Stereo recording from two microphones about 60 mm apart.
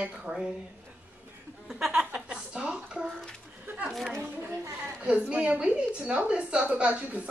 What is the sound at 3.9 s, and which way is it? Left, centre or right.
Speech, centre.